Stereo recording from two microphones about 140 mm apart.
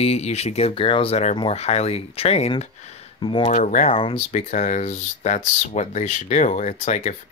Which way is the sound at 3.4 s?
60° left (ahead or behind).